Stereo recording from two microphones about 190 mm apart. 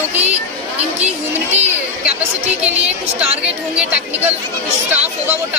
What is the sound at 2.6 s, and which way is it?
Speech, 5° right (ahead or behind).